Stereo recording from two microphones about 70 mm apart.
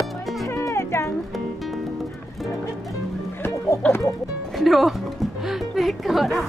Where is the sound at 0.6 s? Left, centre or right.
Left.